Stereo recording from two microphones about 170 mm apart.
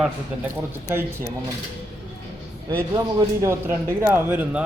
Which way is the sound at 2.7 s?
15° right (ahead or behind).